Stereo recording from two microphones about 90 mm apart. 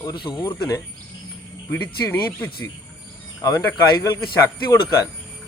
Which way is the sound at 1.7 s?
20° left (ahead or behind).